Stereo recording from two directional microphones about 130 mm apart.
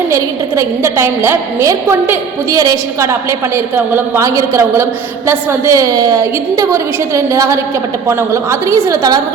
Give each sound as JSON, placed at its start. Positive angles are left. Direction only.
{"t": 0.1, "sound": "a woman's voice", "side_deg": -20}